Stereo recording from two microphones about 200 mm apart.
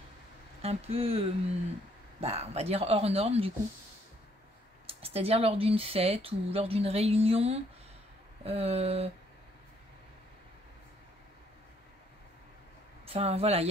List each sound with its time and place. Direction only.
0.6 s speech: 30° right (ahead or behind)
4.8 s speech: 30° right (ahead or behind)
13.1 s speech: 30° right (ahead or behind)